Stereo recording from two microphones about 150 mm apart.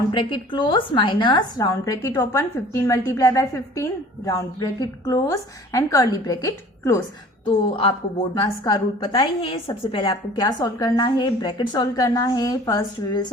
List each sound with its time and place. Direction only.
0.1 s a woman's voice: 35° left (ahead or behind)
7.4 s a woman's voice: 35° left (ahead or behind)